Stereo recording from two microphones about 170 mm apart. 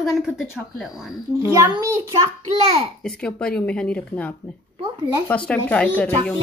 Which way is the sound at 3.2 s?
5° left (ahead or behind).